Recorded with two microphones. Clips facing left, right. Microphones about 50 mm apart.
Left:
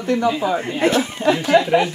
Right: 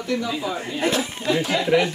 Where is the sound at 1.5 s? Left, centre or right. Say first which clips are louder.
Left 5 dB; left.